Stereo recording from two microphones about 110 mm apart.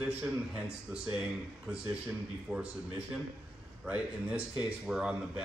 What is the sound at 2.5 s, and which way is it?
Speech, 10° right (ahead or behind).